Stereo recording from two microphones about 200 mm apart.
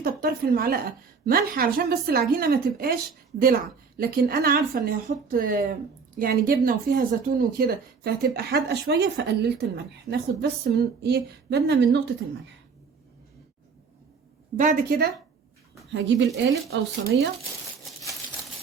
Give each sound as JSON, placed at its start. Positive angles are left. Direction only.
{"t": 0.0, "sound": "speech", "side_deg": -45}
{"t": 14.6, "sound": "speech", "side_deg": -45}
{"t": 15.9, "sound": "speech", "side_deg": -60}